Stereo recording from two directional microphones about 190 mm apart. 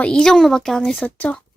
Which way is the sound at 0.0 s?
5° left (ahead or behind).